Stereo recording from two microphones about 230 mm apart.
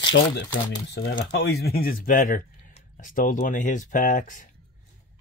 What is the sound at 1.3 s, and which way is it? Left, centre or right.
Speech, left.